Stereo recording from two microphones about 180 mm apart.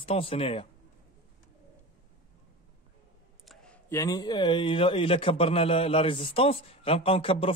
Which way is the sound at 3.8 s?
15° left (ahead or behind).